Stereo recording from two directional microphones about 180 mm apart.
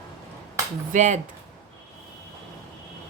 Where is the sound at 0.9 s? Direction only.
40° right (ahead or behind).